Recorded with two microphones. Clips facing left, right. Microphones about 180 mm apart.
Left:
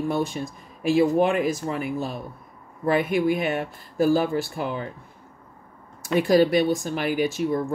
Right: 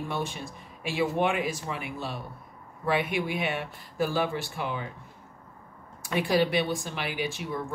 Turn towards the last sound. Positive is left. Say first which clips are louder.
# left 9 dB
turn(degrees=40)  # may be behind; listen again after turning